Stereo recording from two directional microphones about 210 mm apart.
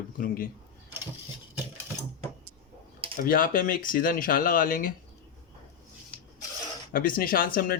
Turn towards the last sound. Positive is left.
turn(degrees=45)  # may be behind; listen again after turning